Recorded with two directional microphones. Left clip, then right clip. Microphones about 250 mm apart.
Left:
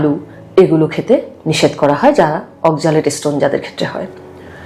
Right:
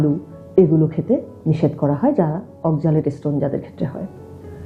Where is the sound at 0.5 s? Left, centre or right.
Centre.